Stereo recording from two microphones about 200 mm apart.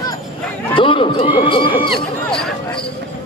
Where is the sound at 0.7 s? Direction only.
25° left (ahead or behind).